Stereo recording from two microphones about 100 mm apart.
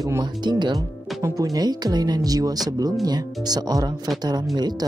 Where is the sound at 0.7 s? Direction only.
35° right (ahead or behind).